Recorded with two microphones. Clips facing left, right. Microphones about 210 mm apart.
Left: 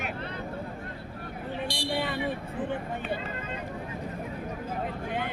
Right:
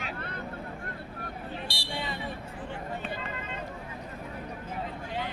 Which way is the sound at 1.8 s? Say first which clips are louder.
Left 6 dB; 55° left (ahead or behind).